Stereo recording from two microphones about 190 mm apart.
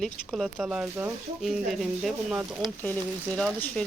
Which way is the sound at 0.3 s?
5° right (ahead or behind).